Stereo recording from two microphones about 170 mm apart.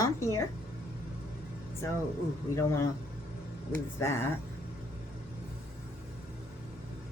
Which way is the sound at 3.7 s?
15° left (ahead or behind).